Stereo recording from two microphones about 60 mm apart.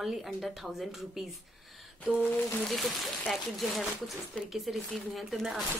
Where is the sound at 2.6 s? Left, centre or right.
Centre.